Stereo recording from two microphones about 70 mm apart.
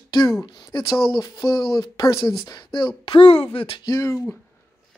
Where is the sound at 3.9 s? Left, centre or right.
Left.